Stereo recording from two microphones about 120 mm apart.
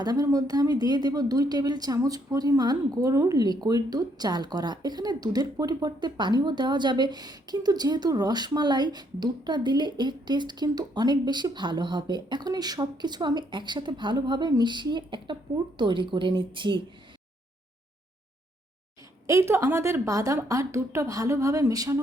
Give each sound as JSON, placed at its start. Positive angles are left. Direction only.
{"t": 0.0, "sound": "a woman's voice", "side_deg": -30}
{"t": 19.3, "sound": "a woman's voice", "side_deg": -25}